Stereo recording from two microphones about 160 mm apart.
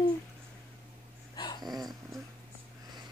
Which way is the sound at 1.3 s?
25° left (ahead or behind).